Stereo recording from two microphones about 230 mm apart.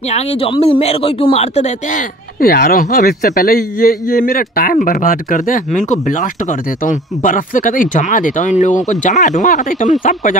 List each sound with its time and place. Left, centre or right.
0.1 s speech: left